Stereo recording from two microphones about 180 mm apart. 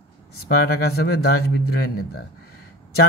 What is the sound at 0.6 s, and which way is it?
Speech, 60° left (ahead or behind).